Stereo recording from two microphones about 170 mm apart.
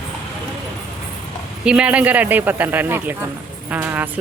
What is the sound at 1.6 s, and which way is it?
Speech, 5° right (ahead or behind).